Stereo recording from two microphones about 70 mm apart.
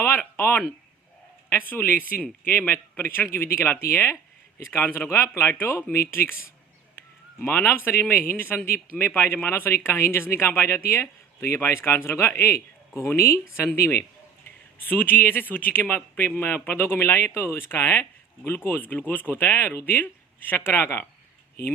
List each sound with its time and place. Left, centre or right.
0.3 s speech: left
7.3 s speech: left